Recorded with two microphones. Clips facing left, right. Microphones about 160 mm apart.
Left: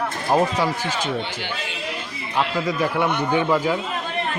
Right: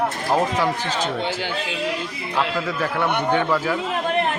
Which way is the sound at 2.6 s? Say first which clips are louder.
Left 2 dB; 15° left (ahead or behind).